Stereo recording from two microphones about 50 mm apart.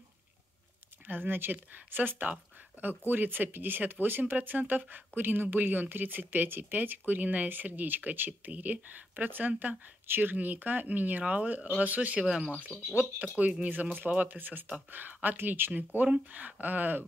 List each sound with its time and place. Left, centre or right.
1.0 s speech: right
12.2 s speech: centre
13.4 s speech: right
16.0 s speech: right